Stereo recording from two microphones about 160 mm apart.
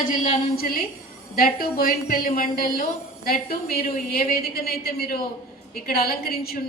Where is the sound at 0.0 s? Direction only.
60° left (ahead or behind).